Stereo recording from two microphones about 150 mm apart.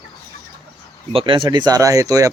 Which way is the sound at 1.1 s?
35° right (ahead or behind).